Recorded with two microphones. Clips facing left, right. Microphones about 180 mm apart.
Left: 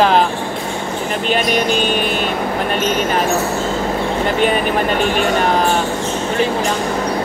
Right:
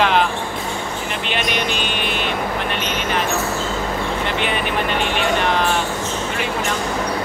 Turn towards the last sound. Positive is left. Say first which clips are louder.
# left 4 dB
turn(degrees=40)  # may be behind; listen again after turning